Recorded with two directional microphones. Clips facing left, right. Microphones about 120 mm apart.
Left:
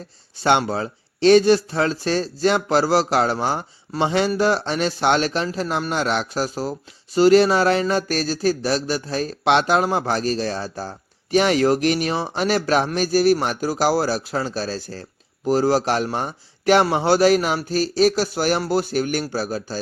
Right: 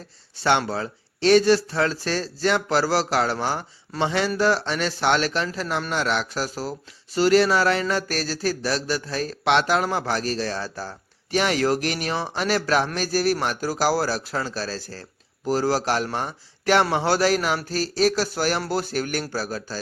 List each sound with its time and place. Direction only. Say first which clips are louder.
0.3 s speech: left 3 dB; 15° left (ahead or behind)